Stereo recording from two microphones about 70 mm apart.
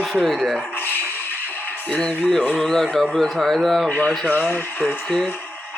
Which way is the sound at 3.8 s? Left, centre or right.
Left.